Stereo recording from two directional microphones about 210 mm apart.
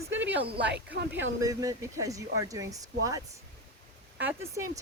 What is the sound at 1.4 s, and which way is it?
Speech, 15° right (ahead or behind).